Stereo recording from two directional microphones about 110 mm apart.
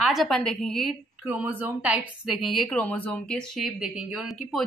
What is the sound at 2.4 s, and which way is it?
Speech, centre (ahead or behind).